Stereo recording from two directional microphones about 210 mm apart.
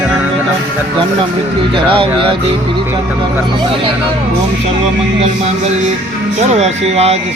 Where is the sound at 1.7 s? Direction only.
25° right (ahead or behind).